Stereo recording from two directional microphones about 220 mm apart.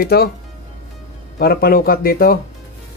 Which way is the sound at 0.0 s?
45° left (ahead or behind).